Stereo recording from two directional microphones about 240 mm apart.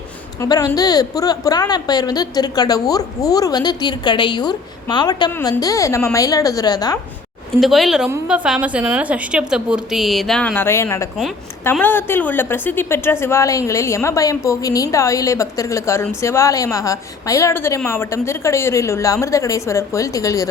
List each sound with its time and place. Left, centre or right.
0.3 s a woman's voice: centre
7.6 s a woman's voice: centre